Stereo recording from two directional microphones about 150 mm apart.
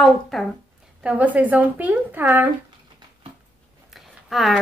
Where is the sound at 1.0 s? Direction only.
10° right (ahead or behind).